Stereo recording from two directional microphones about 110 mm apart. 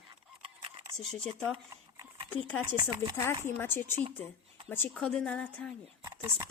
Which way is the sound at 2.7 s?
40° right (ahead or behind).